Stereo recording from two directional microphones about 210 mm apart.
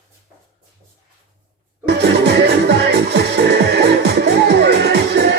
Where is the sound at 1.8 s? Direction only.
55° right (ahead or behind).